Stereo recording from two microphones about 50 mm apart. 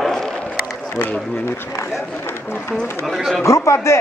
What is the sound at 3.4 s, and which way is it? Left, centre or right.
Speech, left.